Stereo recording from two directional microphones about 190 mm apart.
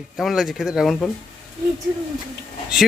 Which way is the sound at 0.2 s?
Centre (ahead or behind).